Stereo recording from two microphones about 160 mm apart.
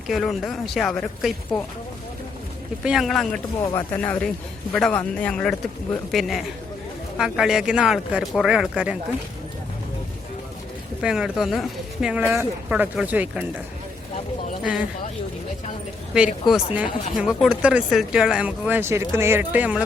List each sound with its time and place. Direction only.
0.1 s speech: centre (ahead or behind)
2.8 s speech: 5° right (ahead or behind)
3.6 s speech: 20° left (ahead or behind)
3.9 s speech: 10° left (ahead or behind)
11.0 s speech: 5° right (ahead or behind)
14.6 s speech: 5° right (ahead or behind)
16.1 s speech: 5° right (ahead or behind)